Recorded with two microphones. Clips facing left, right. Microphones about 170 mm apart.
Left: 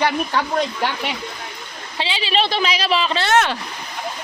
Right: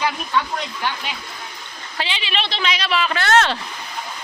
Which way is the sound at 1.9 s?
30° left (ahead or behind).